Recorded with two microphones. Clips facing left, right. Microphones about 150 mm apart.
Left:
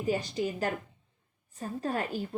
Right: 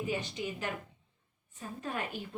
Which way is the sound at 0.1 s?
35° left (ahead or behind).